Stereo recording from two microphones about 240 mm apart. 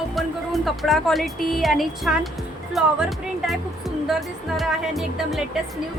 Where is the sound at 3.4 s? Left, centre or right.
Centre.